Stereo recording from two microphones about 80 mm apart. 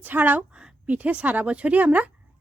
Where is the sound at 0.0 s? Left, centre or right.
Right.